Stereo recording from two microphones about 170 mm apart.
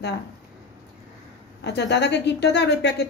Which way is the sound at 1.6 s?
90° left.